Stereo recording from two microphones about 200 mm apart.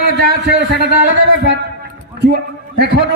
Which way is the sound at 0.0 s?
50° right (ahead or behind).